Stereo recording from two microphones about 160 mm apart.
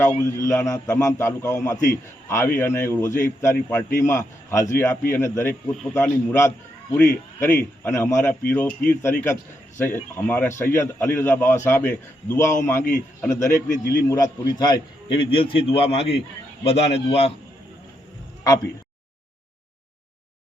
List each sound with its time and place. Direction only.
0.0 s a man's voice: 15° left (ahead or behind); by 17.3 s 40° left (ahead or behind)